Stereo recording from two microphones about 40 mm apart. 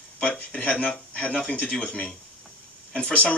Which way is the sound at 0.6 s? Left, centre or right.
Left.